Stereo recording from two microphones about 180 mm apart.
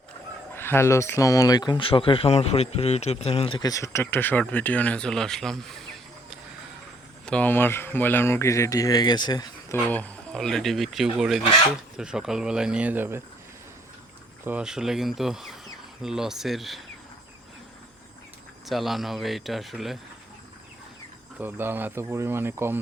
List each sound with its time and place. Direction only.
0.5 s speech: 10° left (ahead or behind)
7.3 s speech: 10° left (ahead or behind); by 13.2 s 10° right (ahead or behind)
14.4 s speech: 5° right (ahead or behind)
18.7 s speech: centre (ahead or behind)
21.3 s speech: 10° right (ahead or behind)